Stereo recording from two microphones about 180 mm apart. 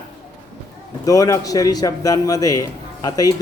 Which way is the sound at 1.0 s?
20° left (ahead or behind).